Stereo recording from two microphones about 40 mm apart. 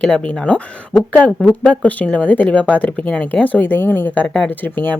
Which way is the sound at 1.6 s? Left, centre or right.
Left.